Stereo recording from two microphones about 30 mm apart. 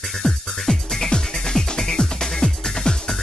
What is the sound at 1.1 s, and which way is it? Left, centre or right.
Music, left.